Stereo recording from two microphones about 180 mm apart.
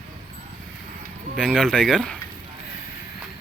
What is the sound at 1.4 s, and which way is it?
Speech, 5° left (ahead or behind).